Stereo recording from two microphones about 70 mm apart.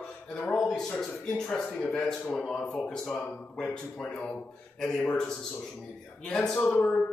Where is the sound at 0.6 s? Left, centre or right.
Centre.